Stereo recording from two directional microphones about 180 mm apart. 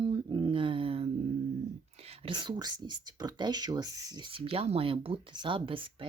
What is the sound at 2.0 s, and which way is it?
Speech, 35° right (ahead or behind).